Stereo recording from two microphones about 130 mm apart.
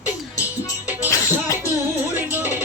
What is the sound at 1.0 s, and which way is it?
Music, 25° left (ahead or behind).